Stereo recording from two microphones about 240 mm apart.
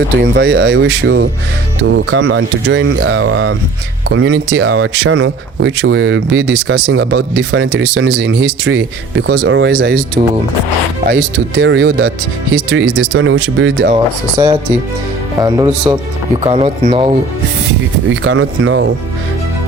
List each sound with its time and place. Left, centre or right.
0.2 s speech: right
11.0 s speech: right
13.9 s speech: centre
18.1 s speech: right